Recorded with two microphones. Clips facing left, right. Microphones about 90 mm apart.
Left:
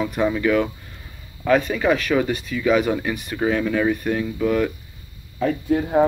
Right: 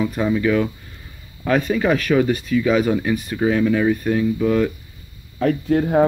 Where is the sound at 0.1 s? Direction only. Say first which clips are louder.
Right 1 dB; 5° left (ahead or behind).